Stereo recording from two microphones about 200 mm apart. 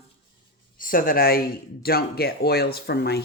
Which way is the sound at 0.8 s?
45° left (ahead or behind).